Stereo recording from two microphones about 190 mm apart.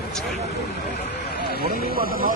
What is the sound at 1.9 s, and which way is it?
Speech, 50° right (ahead or behind).